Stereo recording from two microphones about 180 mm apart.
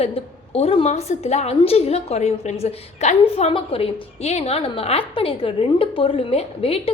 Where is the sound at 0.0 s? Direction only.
35° left (ahead or behind).